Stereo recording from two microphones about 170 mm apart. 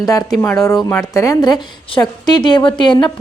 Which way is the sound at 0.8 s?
15° left (ahead or behind).